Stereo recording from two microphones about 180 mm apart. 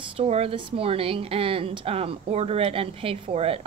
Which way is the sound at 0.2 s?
35° right (ahead or behind).